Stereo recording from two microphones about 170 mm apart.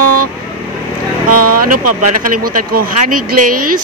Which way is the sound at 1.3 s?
60° right (ahead or behind).